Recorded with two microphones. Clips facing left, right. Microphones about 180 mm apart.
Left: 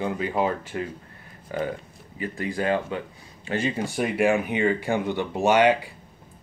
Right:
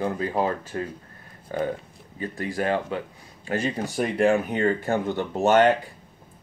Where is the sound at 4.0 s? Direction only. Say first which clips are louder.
Right 1 dB; 5° left (ahead or behind).